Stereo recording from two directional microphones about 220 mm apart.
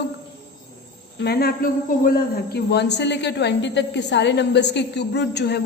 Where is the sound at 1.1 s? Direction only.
45° left (ahead or behind).